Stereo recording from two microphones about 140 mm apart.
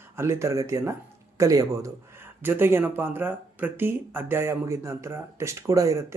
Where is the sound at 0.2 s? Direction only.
20° right (ahead or behind).